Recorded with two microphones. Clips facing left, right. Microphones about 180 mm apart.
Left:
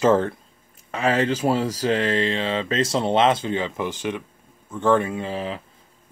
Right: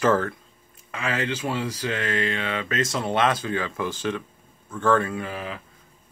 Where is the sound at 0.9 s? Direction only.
35° left (ahead or behind).